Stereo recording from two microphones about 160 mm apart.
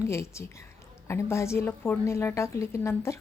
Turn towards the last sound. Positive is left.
turn(degrees=15)  # may be behind; listen again after turning